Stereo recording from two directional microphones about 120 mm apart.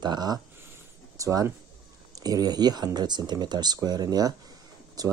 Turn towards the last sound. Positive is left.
turn(degrees=-30)  # may be behind; listen again after turning